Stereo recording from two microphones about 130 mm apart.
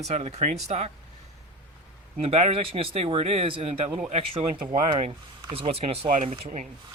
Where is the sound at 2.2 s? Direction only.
55° right (ahead or behind).